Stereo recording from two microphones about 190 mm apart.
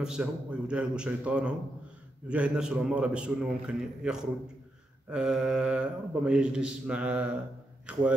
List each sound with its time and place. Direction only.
0.0 s speech: 5° right (ahead or behind)